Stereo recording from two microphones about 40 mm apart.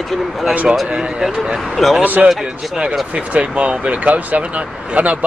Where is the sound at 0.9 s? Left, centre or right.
Right.